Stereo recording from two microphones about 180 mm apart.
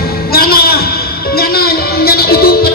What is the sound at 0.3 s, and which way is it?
Music, 55° left (ahead or behind).